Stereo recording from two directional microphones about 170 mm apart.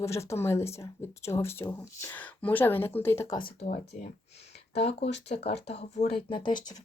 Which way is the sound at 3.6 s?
70° left (ahead or behind).